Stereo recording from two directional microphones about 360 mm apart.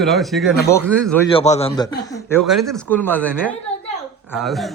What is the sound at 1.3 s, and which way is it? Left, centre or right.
A man's voice, centre.